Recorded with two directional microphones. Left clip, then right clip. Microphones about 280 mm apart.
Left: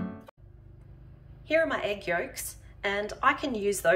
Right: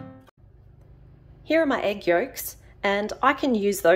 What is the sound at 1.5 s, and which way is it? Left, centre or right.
A woman's voice, right.